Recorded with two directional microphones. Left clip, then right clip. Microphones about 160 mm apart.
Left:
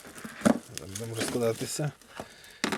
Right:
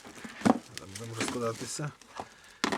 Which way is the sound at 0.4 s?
Centre (ahead or behind).